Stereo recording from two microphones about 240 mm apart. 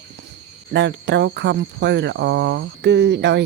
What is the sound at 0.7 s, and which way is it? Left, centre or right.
Speech, right.